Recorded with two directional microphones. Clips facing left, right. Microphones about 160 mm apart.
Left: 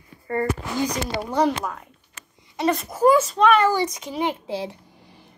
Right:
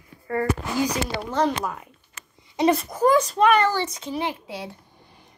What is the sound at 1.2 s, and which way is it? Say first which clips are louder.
Speech: left 3 dB; 10° left (ahead or behind).